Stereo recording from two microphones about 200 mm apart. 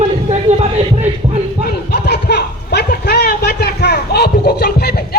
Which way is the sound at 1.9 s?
55° left (ahead or behind).